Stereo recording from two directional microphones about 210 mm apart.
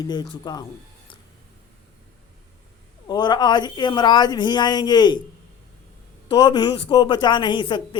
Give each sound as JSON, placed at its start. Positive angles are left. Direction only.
{"t": 0.0, "sound": "speech", "side_deg": 20}
{"t": 3.1, "sound": "speech", "side_deg": 20}
{"t": 6.2, "sound": "speech", "side_deg": 20}